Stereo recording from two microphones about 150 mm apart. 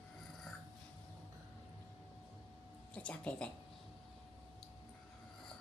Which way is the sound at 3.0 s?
10° left (ahead or behind).